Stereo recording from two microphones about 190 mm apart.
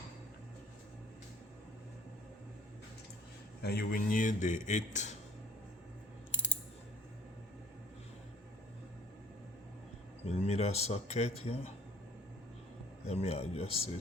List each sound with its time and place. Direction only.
3.6 s a man's voice: 55° left (ahead or behind); by 5.1 s 40° left (ahead or behind)
10.2 s a man's voice: 35° left (ahead or behind)
13.1 s a man's voice: 30° left (ahead or behind)